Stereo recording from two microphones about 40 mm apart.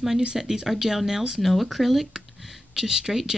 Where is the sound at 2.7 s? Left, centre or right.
Centre.